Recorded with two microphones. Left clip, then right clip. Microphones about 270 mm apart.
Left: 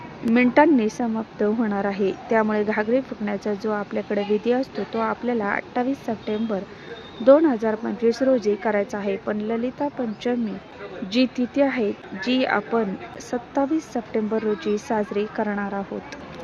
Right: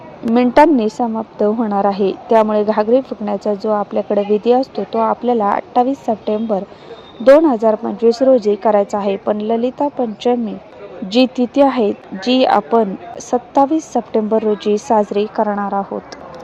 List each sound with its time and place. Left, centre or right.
0.3 s a woman's voice: centre
1.1 s a woman's voice: centre
15.4 s a woman's voice: centre